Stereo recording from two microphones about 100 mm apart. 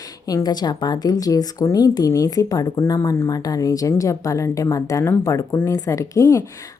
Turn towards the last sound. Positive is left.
turn(degrees=35)  # may be behind; listen again after turning